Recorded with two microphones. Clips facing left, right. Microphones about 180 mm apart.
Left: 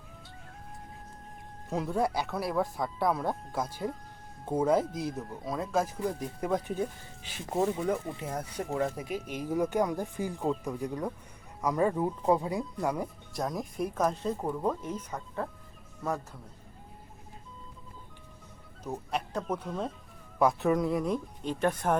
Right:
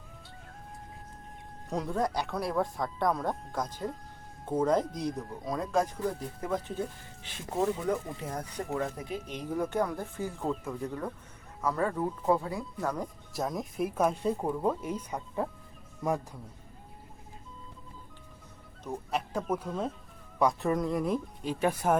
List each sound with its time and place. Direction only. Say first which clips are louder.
1.6 s speech: left 1 dB; 5° left (ahead or behind)
13.3 s speech: right 1 dB; centre (ahead or behind)
19.1 s speech: right 2 dB; 5° right (ahead or behind)